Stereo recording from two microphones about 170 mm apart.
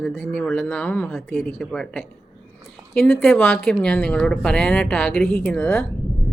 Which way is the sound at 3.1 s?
10° left (ahead or behind).